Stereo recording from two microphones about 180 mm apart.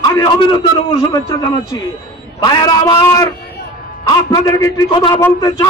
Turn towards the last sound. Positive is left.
turn(degrees=25)  # may be behind; listen again after turning